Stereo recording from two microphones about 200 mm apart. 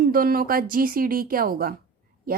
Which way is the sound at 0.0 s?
45° right (ahead or behind).